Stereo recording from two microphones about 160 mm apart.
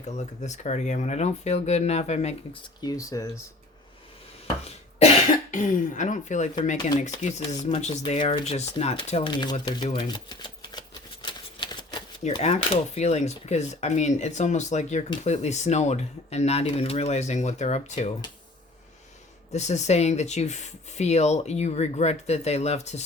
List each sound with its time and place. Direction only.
0.0 s speech: 45° left (ahead or behind)
2.8 s speech: 20° left (ahead or behind)
4.9 s speech: 40° left (ahead or behind); by 10.8 s 25° left (ahead or behind)
11.3 s shuffling cards: 30° left (ahead or behind)
12.4 s speech: 40° left (ahead or behind)
19.5 s speech: 45° left (ahead or behind)